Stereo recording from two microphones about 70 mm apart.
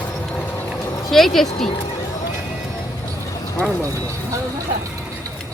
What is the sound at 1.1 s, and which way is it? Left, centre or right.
Speech, centre.